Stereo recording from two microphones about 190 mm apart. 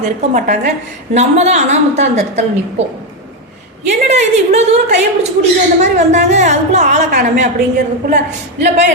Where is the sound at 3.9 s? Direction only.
35° right (ahead or behind).